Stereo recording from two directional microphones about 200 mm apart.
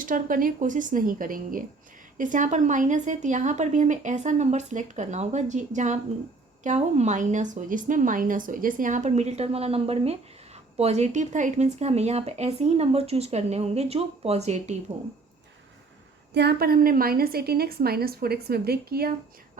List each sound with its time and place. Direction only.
0.0 s a woman's voice: 45° right (ahead or behind)
16.3 s a woman's voice: 55° right (ahead or behind)